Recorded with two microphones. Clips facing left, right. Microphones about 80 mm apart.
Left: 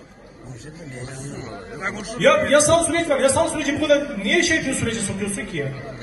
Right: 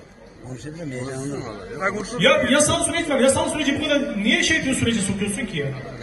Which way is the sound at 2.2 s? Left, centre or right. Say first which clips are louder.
Left 2 dB; centre.